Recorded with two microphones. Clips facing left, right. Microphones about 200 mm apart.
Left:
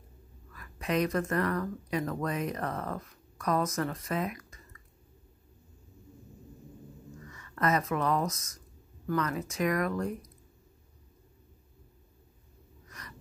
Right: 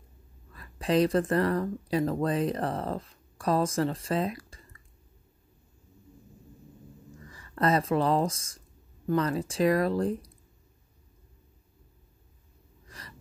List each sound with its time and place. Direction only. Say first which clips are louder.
0.5 s speech: right 5 dB; 30° right (ahead or behind)
7.2 s speech: right 4 dB; 30° right (ahead or behind)
12.8 s gasp: right 1 dB; 30° right (ahead or behind)